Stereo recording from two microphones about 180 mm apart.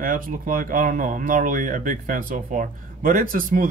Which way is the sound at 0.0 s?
50° right (ahead or behind).